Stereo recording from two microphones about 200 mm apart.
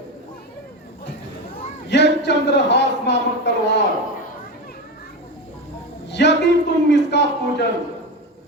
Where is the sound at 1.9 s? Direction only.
60° left (ahead or behind).